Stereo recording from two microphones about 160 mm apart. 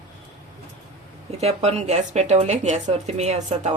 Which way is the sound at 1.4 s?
40° right (ahead or behind).